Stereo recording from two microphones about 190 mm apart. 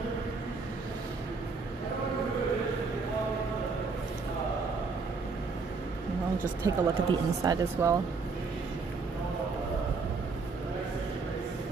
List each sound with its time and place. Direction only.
6.6 s speech: 20° right (ahead or behind)